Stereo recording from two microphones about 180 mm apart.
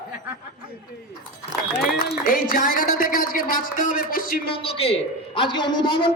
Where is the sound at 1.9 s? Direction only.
55° left (ahead or behind).